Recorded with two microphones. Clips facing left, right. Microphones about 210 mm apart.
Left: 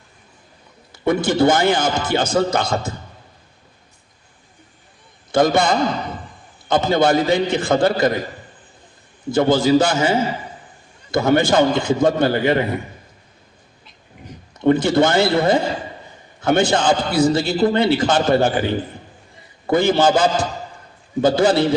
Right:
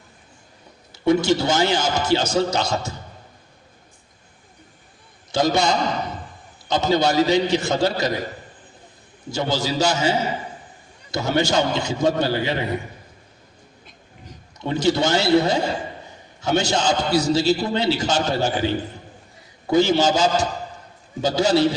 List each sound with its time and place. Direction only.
0.9 s a man's voice: 55° left (ahead or behind)
5.3 s a man's voice: 55° left (ahead or behind)
9.3 s a man's voice: 55° left (ahead or behind)
14.6 s a man's voice: 55° left (ahead or behind)